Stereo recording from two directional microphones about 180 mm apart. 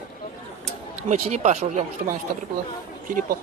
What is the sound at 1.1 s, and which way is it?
Speech, 40° right (ahead or behind).